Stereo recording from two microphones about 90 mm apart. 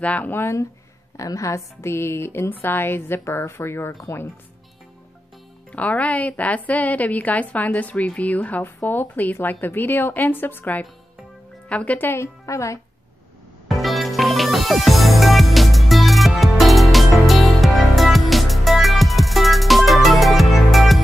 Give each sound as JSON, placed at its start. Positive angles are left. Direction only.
{"t": 0.0, "sound": "a woman's voice", "side_deg": 15}
{"t": 5.7, "sound": "a woman's voice", "side_deg": 15}
{"t": 13.7, "sound": "music", "side_deg": 0}